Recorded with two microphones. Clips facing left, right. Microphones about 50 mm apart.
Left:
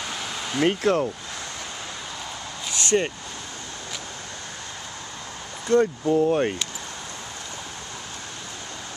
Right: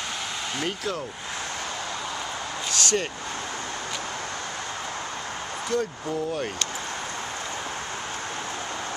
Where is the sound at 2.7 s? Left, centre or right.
Left.